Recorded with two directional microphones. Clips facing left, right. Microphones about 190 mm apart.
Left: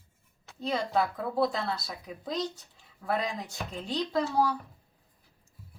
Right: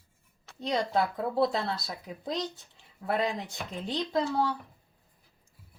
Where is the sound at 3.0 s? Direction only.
25° right (ahead or behind).